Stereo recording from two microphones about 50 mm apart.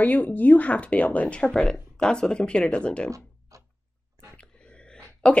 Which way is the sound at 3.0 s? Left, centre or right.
Right.